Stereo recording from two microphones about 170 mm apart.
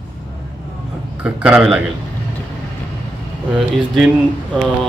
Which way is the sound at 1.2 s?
5° right (ahead or behind).